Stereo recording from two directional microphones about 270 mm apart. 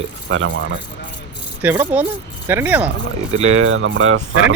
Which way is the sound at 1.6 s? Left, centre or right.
Centre.